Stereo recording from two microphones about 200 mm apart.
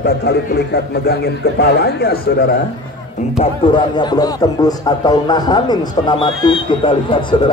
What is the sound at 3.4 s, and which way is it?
Speech, 25° left (ahead or behind).